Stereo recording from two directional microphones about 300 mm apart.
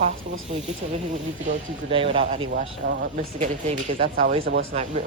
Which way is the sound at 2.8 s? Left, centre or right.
Right.